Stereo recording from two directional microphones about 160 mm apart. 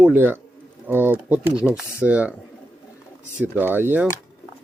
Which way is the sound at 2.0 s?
10° right (ahead or behind).